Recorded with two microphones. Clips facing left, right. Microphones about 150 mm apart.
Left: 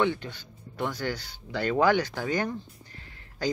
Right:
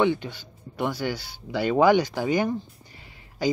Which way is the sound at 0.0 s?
15° right (ahead or behind).